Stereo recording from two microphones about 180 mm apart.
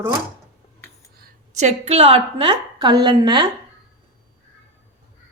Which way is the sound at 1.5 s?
40° right (ahead or behind).